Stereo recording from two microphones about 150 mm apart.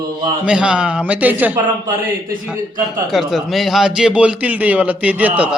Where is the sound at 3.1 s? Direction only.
Centre (ahead or behind).